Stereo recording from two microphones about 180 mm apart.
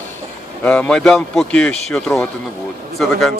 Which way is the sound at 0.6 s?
5° left (ahead or behind).